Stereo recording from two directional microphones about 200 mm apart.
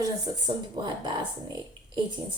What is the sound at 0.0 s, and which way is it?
Speech, 20° right (ahead or behind).